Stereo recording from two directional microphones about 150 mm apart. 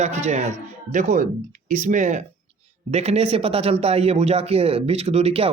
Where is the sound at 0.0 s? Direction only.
50° right (ahead or behind).